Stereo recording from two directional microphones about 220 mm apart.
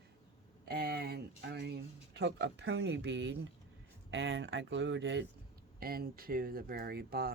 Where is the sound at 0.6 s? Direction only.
45° right (ahead or behind).